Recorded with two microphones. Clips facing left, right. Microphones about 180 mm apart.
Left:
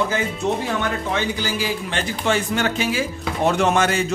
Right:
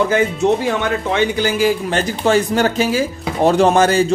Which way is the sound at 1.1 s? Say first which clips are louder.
Right 7 dB; 60° right (ahead or behind).